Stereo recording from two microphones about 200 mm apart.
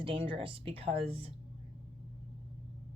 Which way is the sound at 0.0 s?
25° right (ahead or behind).